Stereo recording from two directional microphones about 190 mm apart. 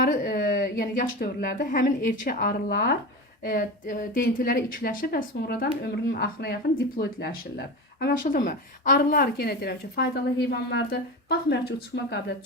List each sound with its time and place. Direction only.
0.0 s a woman's voice: 50° left (ahead or behind)